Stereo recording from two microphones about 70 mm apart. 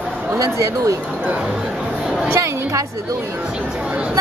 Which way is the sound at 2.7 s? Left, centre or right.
Right.